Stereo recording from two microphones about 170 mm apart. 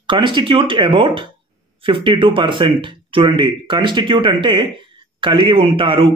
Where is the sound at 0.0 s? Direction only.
30° right (ahead or behind).